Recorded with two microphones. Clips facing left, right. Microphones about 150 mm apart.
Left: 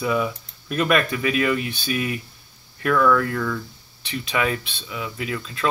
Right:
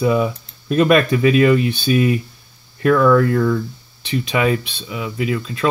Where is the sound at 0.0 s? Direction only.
30° right (ahead or behind).